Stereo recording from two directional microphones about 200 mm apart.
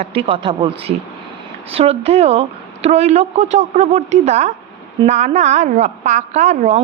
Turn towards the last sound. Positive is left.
turn(degrees=-35)  # may be behind; listen again after turning